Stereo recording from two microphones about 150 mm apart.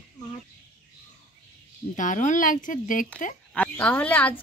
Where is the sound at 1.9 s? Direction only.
60° left (ahead or behind).